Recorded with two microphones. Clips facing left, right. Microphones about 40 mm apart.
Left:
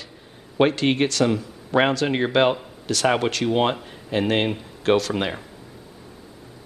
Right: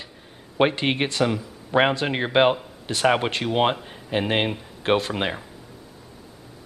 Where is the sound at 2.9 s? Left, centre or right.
Right.